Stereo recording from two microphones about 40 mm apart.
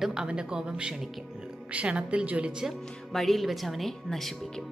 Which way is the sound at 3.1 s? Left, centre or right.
Centre.